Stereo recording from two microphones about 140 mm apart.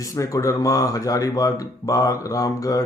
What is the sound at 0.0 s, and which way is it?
A man's voice, 25° left (ahead or behind).